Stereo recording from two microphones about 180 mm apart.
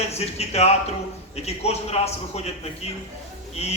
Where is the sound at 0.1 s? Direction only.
35° left (ahead or behind).